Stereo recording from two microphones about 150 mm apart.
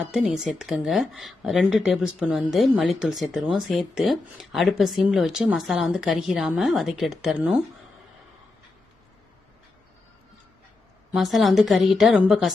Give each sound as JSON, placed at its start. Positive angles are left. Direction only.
{"t": 0.1, "sound": "a woman's voice", "side_deg": -5}
{"t": 11.1, "sound": "a woman's voice", "side_deg": 0}